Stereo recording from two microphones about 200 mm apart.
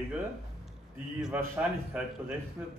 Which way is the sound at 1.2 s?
10° right (ahead or behind).